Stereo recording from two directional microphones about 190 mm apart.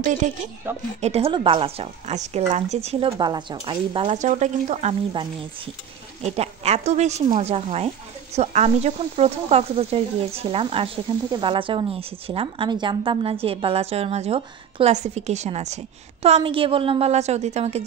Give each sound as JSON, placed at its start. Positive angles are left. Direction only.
{"t": 0.7, "sound": "a woman's voice", "side_deg": -10}
{"t": 1.0, "sound": "a woman's voice", "side_deg": -30}
{"t": 6.2, "sound": "a woman's voice", "side_deg": -35}